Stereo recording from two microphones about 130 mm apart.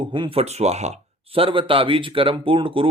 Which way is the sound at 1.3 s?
45° right (ahead or behind).